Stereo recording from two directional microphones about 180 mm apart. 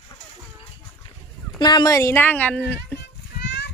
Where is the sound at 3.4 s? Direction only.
70° left (ahead or behind).